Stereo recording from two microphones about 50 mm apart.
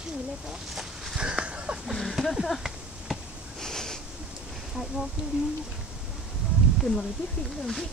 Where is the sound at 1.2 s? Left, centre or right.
Centre.